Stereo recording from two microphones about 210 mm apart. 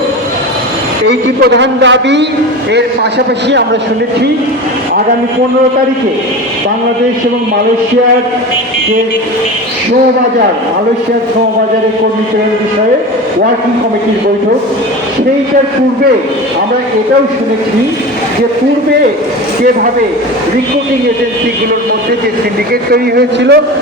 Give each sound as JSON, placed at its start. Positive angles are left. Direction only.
{"t": 1.0, "sound": "a man's voice", "side_deg": -55}
{"t": 22.9, "sound": "a man's voice", "side_deg": -50}